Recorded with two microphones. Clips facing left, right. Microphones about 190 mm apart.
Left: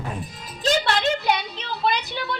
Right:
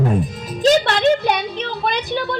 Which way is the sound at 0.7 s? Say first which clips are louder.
Right 7 dB; 50° right (ahead or behind).